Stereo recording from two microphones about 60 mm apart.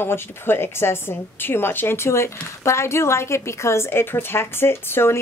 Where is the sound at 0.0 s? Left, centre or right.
Left.